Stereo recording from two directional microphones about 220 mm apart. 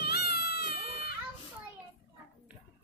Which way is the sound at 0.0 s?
45° left (ahead or behind).